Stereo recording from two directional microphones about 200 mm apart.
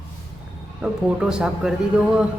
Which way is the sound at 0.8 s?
5° right (ahead or behind).